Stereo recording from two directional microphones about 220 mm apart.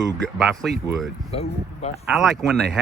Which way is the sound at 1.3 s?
30° left (ahead or behind).